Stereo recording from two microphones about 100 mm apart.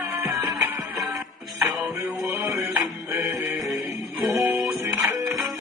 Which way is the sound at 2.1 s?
30° right (ahead or behind).